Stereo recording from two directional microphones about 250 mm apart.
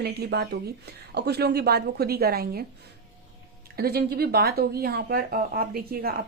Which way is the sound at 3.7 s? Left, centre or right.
Right.